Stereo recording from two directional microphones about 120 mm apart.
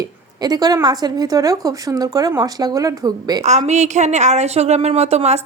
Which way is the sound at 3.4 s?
75° right (ahead or behind).